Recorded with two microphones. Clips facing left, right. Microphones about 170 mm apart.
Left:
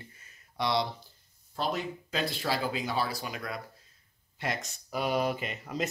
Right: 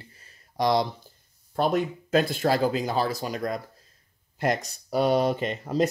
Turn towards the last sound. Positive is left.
turn(degrees=-35)  # may be behind; listen again after turning